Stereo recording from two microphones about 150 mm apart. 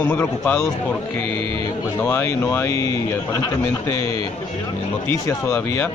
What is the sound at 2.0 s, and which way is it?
Speech, 15° left (ahead or behind).